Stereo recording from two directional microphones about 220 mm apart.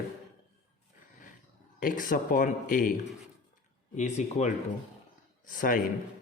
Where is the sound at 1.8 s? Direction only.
40° left (ahead or behind).